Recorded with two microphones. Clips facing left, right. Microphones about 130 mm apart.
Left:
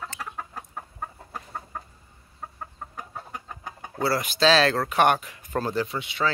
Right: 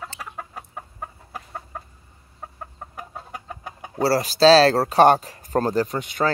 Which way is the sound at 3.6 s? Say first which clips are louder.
Right 4 dB; 10° right (ahead or behind).